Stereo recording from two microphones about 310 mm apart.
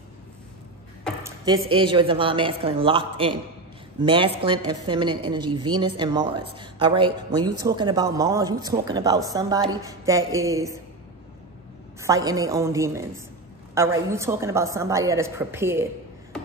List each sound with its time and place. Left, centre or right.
1.2 s a woman's voice: centre
12.0 s a woman's voice: centre